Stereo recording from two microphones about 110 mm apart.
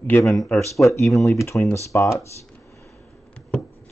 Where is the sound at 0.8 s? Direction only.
25° left (ahead or behind).